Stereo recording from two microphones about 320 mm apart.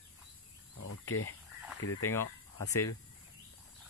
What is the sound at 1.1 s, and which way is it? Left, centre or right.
Speech, left.